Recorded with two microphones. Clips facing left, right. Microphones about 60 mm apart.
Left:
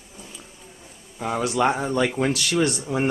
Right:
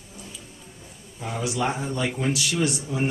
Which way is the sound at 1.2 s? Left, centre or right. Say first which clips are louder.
Left 5 dB; left.